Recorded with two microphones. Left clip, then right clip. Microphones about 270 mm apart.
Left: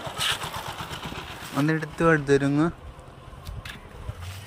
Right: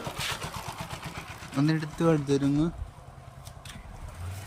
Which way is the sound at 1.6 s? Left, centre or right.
Centre.